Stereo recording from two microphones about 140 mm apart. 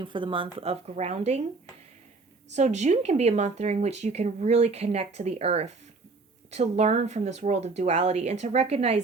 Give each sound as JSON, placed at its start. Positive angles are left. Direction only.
{"t": 0.0, "sound": "speech", "side_deg": -35}
{"t": 2.6, "sound": "speech", "side_deg": -55}